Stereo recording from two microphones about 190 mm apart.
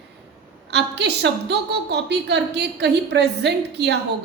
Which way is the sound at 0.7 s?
65° right (ahead or behind).